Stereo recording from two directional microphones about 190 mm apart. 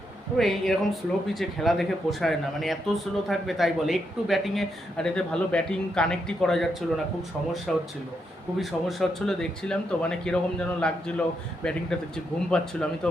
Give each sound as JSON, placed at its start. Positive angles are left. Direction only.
{"t": 0.3, "sound": "speech", "side_deg": 0}
{"t": 7.7, "sound": "speech", "side_deg": 0}